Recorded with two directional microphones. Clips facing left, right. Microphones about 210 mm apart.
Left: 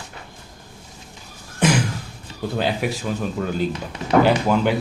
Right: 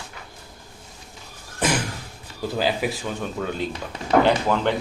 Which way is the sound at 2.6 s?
Centre (ahead or behind).